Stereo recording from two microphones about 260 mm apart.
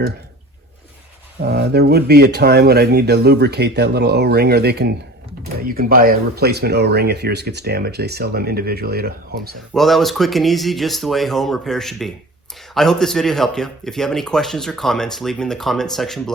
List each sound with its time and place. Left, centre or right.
1.4 s speech: right
9.7 s speech: centre